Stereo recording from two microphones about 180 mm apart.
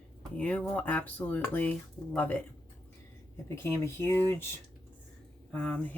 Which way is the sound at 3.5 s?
15° left (ahead or behind).